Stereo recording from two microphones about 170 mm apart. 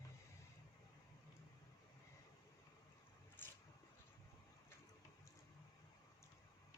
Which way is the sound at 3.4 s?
10° left (ahead or behind).